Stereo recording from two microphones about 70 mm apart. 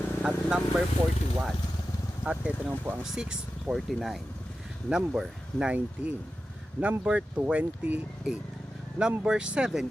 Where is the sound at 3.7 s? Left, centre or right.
Centre.